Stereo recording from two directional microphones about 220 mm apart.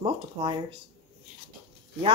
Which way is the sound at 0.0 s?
20° right (ahead or behind).